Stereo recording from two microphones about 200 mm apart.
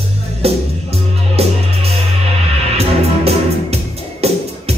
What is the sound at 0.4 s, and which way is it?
Music, 30° right (ahead or behind).